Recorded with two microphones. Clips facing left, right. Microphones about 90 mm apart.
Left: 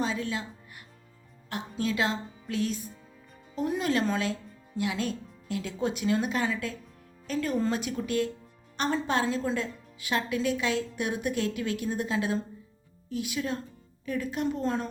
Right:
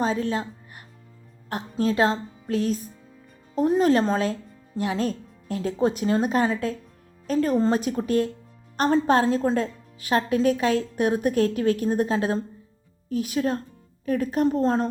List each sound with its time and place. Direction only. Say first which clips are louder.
0.0 s a woman's voice: right 6 dB; 40° right (ahead or behind)